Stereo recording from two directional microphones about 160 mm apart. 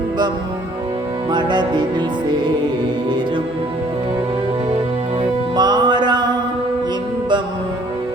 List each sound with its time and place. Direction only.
1.3 s music: 30° right (ahead or behind)
5.5 s music: 25° right (ahead or behind)